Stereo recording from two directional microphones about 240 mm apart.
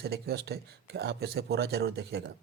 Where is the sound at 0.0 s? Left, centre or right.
Right.